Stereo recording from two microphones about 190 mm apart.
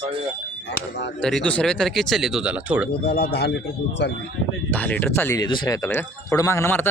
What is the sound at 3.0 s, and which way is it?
A man's voice, 55° left (ahead or behind).